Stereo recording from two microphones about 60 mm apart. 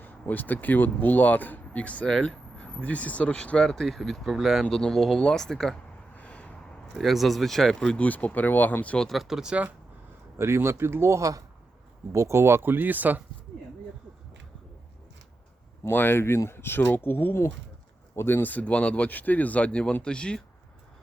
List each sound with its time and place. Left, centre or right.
0.0 s speech: left; by 4.6 s centre
4.7 s speech: centre
6.1 s a sound: left
6.9 s speech: centre
7.9 s speech: left
9.1 s speech: centre
10.3 s speech: right
11.2 s speech: right
12.1 s speech: right
15.8 s speech: left; by 20.4 s centre